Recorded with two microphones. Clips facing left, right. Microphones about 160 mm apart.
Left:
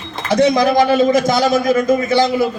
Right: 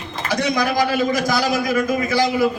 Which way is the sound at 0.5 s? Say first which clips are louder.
Left 6 dB; 25° left (ahead or behind).